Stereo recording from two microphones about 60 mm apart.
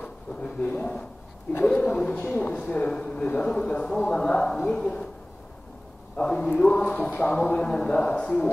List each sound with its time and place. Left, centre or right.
0.0 s a sound: left
1.6 s speech: left
6.1 s speech: centre